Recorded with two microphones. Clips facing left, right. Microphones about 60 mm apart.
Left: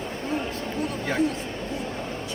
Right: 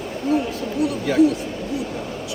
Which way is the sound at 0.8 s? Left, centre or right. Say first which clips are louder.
Right 9 dB; left.